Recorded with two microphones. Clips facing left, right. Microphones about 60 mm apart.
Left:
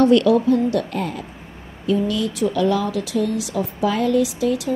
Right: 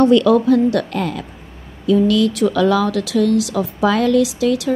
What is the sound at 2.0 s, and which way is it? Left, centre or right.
A woman's voice, right.